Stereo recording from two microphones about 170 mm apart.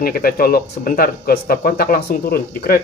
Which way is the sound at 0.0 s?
60° left (ahead or behind).